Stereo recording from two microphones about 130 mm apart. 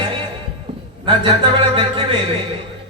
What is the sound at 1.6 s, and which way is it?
Music, 40° right (ahead or behind).